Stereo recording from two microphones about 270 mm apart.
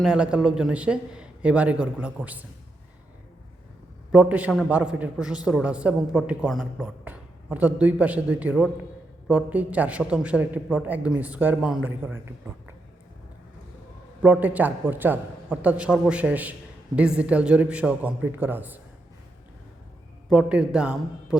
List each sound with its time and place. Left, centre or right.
0.0 s a man's voice: centre
4.1 s a man's voice: centre
14.2 s a man's voice: centre
20.3 s a man's voice: centre